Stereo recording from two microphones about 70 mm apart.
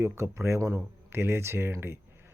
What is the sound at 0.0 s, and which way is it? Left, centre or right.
Speech, right.